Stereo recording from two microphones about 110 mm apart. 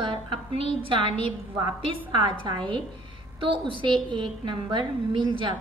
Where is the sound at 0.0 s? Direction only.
50° right (ahead or behind).